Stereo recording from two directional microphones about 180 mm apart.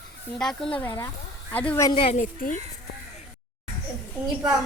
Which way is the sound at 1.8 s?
30° left (ahead or behind).